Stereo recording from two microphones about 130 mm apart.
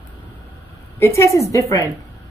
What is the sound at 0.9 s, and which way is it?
Speech, 20° left (ahead or behind).